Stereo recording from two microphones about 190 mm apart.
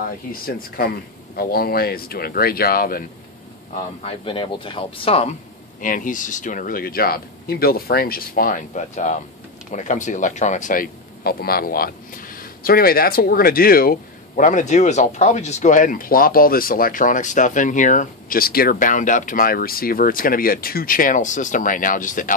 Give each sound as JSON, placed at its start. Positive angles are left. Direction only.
{"t": 0.3, "sound": "speech", "side_deg": 50}
{"t": 4.0, "sound": "speech", "side_deg": 30}
{"t": 5.8, "sound": "speech", "side_deg": 45}